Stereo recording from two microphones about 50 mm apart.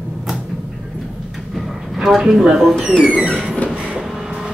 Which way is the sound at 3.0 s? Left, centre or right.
Right.